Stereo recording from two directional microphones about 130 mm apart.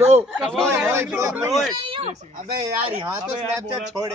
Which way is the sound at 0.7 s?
20° right (ahead or behind).